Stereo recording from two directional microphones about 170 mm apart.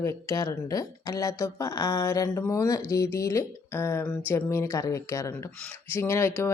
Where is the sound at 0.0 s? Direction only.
20° left (ahead or behind).